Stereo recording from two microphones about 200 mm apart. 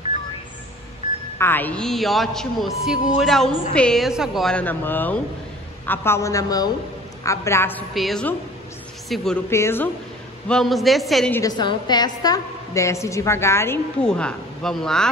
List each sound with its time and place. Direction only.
1.4 s a man's voice: 10° left (ahead or behind)
7.9 s a man's voice: centre (ahead or behind)
10.5 s a man's voice: centre (ahead or behind)
11.3 s a woman's voice: 20° left (ahead or behind); by 15.0 s 5° left (ahead or behind)